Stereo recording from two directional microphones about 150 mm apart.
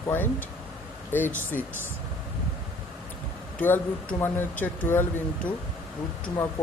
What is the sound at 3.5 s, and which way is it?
Speech, 10° left (ahead or behind).